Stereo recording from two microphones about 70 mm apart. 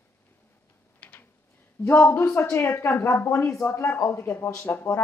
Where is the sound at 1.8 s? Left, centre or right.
Left.